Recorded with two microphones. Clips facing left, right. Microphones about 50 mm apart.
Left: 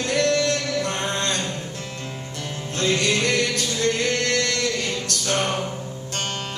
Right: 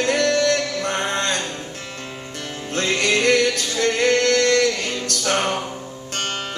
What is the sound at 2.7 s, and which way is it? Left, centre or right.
Music, right.